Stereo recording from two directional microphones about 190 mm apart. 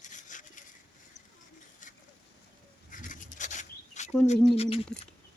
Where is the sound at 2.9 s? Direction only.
45° left (ahead or behind).